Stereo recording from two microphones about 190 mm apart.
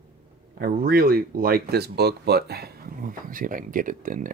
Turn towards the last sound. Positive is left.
turn(degrees=-45)  # may be behind; listen again after turning